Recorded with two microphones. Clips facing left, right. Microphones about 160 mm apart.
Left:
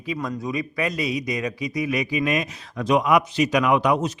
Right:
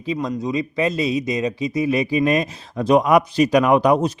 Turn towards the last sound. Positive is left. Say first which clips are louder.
# right 4 dB
turn(degrees=-35)  # may be behind; listen again after turning